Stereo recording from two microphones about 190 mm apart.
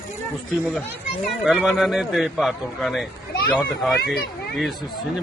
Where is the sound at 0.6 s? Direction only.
5° left (ahead or behind).